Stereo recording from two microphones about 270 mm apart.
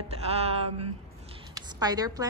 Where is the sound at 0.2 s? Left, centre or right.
Right.